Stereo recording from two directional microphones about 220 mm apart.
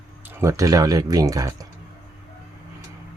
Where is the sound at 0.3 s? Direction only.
15° right (ahead or behind).